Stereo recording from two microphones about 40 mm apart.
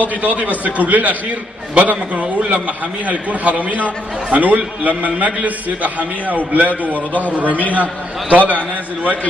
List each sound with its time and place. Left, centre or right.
0.2 s a man's voice: right